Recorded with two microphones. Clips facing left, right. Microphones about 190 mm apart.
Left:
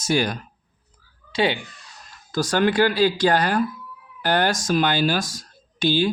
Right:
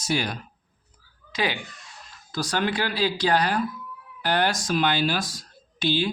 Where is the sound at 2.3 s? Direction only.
45° left (ahead or behind).